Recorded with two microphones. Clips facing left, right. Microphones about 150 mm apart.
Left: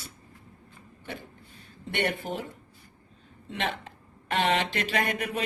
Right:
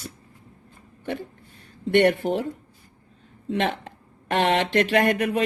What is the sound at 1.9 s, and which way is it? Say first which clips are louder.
Speech: right 11 dB; 50° right (ahead or behind).